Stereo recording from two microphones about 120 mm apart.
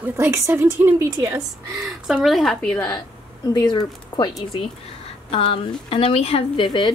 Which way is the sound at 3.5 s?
35° left (ahead or behind).